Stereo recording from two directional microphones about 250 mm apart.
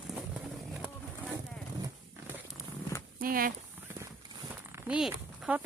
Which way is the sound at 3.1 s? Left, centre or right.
Right.